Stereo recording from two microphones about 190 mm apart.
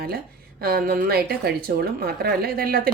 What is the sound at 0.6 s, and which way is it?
A woman's voice, 50° right (ahead or behind).